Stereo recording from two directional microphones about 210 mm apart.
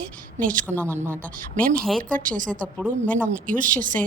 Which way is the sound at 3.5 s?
40° right (ahead or behind).